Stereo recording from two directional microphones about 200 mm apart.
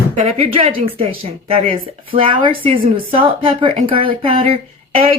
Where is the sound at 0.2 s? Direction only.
30° right (ahead or behind).